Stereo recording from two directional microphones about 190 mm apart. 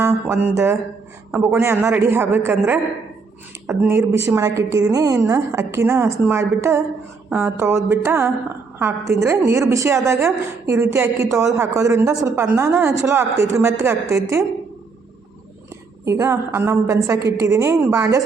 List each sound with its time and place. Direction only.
0.0 s a woman's voice: 10° right (ahead or behind)
16.0 s a woman's voice: 15° right (ahead or behind)